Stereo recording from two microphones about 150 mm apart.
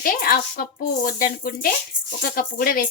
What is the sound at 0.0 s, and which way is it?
A woman's voice, 70° left (ahead or behind).